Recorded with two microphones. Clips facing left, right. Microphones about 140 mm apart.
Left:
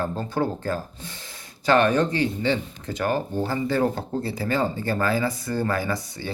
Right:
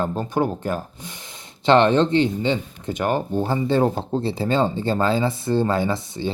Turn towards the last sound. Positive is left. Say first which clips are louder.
# right 5 dB
turn(degrees=-25)  # may be behind; listen again after turning